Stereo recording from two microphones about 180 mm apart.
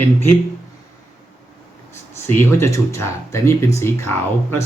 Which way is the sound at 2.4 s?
15° left (ahead or behind).